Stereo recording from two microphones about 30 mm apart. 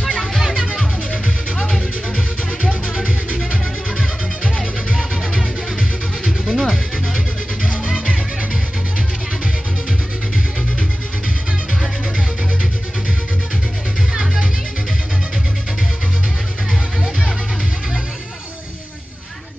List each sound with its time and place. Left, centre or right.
0.0 s music: centre
6.2 s music: centre
7.9 s music: left